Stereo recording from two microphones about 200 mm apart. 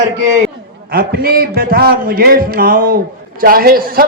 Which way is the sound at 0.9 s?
50° right (ahead or behind).